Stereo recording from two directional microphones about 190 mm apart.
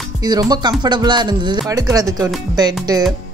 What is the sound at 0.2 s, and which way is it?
Speech, 20° right (ahead or behind).